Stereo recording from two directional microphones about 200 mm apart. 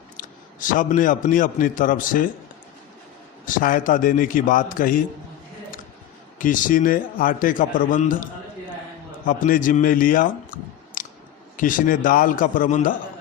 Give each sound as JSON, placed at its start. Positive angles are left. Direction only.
{"t": 0.2, "sound": "a man's voice", "side_deg": 40}
{"t": 3.4, "sound": "a man's voice", "side_deg": 45}
{"t": 6.4, "sound": "a man's voice", "side_deg": 40}
{"t": 9.2, "sound": "a man's voice", "side_deg": 40}
{"t": 11.0, "sound": "a sound", "side_deg": 40}
{"t": 11.5, "sound": "a man's voice", "side_deg": 45}